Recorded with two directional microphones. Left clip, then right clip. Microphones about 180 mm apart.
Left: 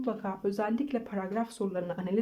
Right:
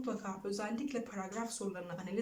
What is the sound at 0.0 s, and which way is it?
Speech, 35° left (ahead or behind).